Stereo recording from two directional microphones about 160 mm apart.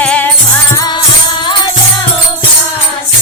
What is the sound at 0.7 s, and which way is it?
Music, 25° left (ahead or behind).